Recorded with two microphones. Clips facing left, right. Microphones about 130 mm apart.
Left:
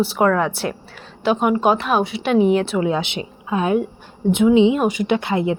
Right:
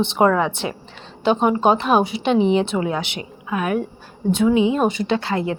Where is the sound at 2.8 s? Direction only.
20° left (ahead or behind).